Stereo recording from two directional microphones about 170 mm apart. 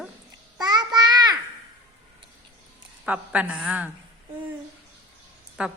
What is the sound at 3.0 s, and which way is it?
Speech, 10° right (ahead or behind).